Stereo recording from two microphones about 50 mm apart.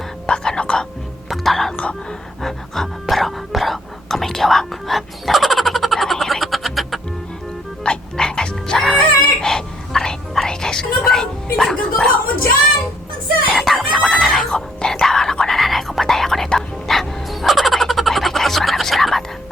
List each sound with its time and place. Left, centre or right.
0.3 s whispering: centre
1.5 s whispering: centre
1.7 s whispering: left
2.0 s whispering: centre
7.9 s frog: centre
9.0 s whispering: centre
13.5 s chicken: centre
14.5 s a sound: centre
15.0 s whispering: centre
16.5 s bird: centre